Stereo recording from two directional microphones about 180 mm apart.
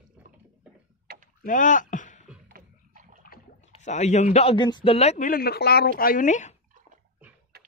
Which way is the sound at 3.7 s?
40° left (ahead or behind).